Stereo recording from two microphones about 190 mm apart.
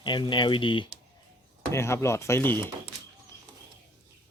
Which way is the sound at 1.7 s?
15° left (ahead or behind).